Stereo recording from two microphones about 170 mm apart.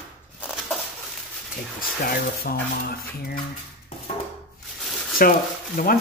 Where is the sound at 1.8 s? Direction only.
60° left (ahead or behind).